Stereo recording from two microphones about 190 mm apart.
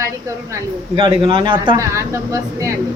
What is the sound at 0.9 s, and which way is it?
A woman's voice, 25° right (ahead or behind).